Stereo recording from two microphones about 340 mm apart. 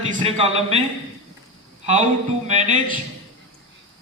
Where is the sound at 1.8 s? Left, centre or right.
Centre.